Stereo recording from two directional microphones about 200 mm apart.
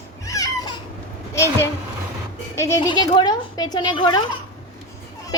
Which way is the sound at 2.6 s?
15° left (ahead or behind).